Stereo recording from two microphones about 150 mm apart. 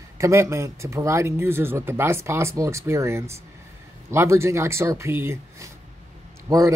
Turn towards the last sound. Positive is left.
turn(degrees=-20)  # may be behind; listen again after turning